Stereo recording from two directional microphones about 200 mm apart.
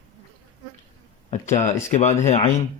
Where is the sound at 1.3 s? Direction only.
40° left (ahead or behind).